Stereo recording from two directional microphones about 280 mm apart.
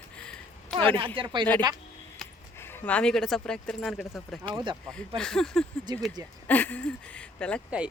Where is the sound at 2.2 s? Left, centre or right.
Centre.